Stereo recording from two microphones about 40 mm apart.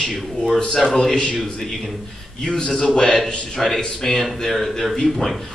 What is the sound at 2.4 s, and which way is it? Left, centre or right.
Speech, left.